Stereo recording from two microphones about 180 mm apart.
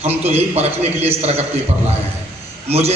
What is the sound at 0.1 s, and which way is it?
A man's voice, 35° right (ahead or behind).